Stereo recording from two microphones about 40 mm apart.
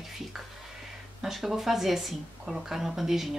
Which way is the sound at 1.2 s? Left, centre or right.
Centre.